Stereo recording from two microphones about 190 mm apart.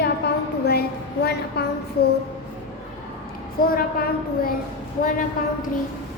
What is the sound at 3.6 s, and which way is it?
Speech, 50° left (ahead or behind).